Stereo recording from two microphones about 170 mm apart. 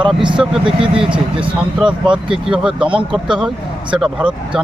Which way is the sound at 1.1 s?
30° right (ahead or behind).